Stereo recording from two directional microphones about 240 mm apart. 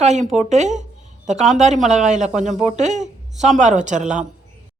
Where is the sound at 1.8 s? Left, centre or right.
Right.